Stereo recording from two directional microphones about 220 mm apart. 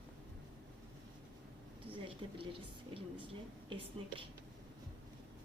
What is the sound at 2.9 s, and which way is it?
A woman's voice, 25° right (ahead or behind).